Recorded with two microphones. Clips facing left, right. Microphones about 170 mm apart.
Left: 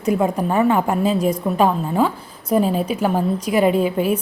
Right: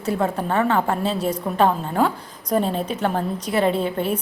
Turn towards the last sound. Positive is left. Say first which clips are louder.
# left 4 dB
turn(degrees=10)  # may be behind; listen again after turning